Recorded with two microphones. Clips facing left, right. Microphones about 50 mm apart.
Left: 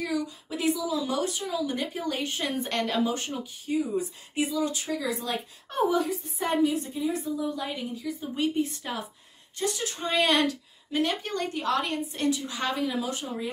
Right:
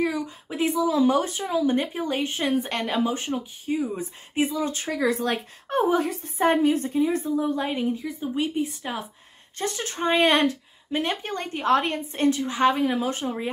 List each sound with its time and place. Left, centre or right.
0.0 s a woman's voice: right
4.8 s a woman's voice: right
5.8 s a woman's voice: right
8.4 s speech: centre
9.6 s a woman's voice: right